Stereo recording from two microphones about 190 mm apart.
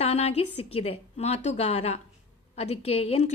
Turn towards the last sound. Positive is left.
turn(degrees=30)  # may be behind; listen again after turning